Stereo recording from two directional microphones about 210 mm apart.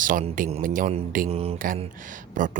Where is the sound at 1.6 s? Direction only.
40° right (ahead or behind).